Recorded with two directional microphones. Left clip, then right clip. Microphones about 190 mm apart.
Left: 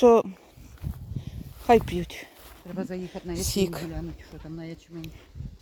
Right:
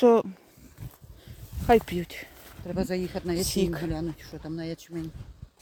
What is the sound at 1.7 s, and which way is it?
Speech, centre (ahead or behind).